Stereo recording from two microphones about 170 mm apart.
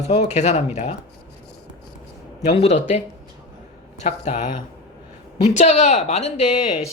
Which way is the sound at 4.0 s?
40° left (ahead or behind).